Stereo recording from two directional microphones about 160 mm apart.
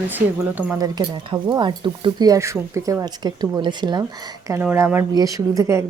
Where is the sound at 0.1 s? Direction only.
10° right (ahead or behind).